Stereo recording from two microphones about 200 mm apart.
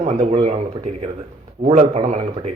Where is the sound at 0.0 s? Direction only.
35° right (ahead or behind).